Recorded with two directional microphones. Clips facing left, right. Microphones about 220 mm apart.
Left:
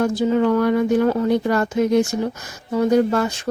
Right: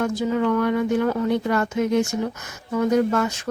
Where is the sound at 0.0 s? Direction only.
30° left (ahead or behind).